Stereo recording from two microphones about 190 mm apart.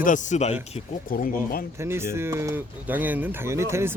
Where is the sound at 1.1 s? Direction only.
50° left (ahead or behind).